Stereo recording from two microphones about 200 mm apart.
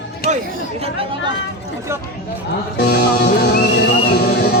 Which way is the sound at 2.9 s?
55° left (ahead or behind).